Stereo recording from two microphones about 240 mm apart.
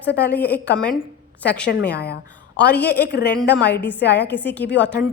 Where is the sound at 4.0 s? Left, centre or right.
Left.